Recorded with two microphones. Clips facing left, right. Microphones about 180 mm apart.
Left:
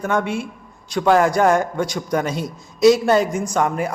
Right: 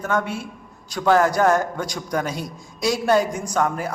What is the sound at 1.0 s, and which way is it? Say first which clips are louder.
Speech: left 2 dB; 10° left (ahead or behind).